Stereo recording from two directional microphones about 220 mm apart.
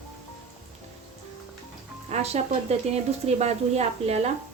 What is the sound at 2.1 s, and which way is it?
Speech, 30° right (ahead or behind).